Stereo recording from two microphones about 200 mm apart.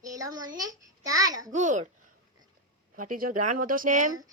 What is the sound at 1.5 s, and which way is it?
Speech, 40° right (ahead or behind).